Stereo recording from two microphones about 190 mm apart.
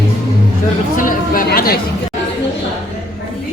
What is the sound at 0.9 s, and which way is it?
Speech, 45° left (ahead or behind).